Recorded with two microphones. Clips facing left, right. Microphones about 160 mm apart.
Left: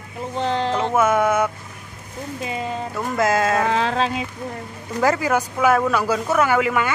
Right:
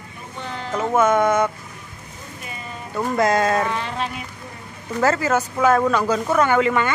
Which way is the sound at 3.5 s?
90° left.